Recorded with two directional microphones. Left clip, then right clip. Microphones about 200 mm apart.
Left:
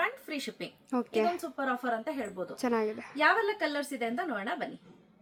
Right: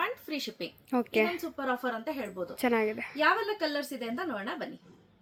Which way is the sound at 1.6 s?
20° left (ahead or behind).